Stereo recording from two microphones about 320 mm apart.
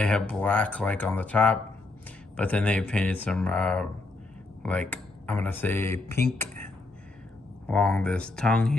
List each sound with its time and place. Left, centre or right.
0.0 s speech: centre
7.6 s speech: centre